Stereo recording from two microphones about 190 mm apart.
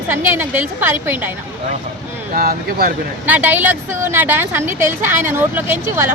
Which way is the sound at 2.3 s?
55° right (ahead or behind).